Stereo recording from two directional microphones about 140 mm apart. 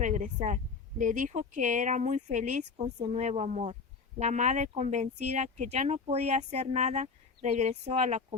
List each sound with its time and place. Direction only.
0.0 s speech: 60° right (ahead or behind)